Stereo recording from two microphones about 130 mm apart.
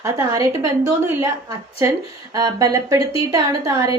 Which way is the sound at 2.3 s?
30° right (ahead or behind).